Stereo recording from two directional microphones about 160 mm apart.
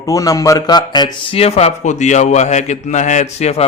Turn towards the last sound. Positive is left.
turn(degrees=45)  # may be behind; listen again after turning